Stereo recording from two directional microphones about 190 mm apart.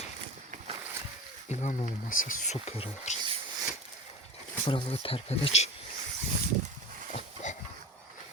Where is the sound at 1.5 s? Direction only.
40° left (ahead or behind).